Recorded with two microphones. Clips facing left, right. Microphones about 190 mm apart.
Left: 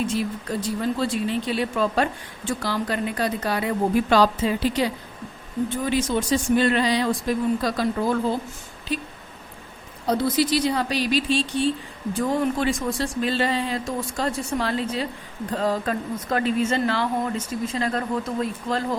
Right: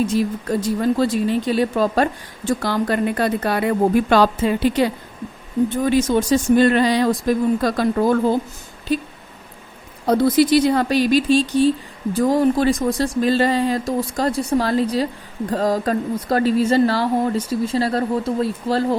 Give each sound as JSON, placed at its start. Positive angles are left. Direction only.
{"t": 0.0, "sound": "a woman's voice", "side_deg": -40}
{"t": 5.8, "sound": "a woman's voice", "side_deg": -45}
{"t": 10.1, "sound": "a woman's voice", "side_deg": -55}